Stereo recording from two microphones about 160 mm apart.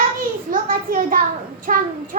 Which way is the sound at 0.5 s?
60° right (ahead or behind).